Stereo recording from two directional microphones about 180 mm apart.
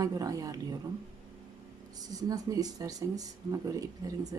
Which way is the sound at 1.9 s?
20° right (ahead or behind).